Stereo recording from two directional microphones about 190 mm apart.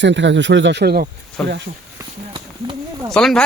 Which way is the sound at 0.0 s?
70° right (ahead or behind).